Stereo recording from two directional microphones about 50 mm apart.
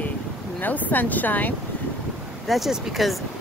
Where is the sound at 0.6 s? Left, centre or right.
Left.